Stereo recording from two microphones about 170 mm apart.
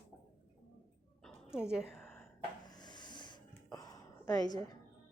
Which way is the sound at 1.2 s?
5° right (ahead or behind).